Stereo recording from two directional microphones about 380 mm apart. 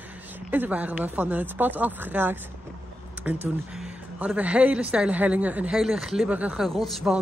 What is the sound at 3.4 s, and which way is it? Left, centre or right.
Speech, centre.